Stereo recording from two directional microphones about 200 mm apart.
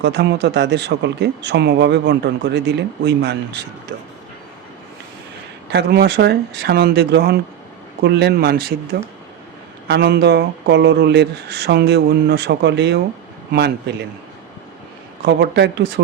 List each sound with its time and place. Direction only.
0.0 s speech: 60° right (ahead or behind)
5.6 s speech: 55° right (ahead or behind)
15.2 s speech: 55° right (ahead or behind)